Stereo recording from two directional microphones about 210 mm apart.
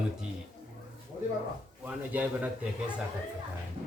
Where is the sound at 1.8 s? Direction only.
10° right (ahead or behind).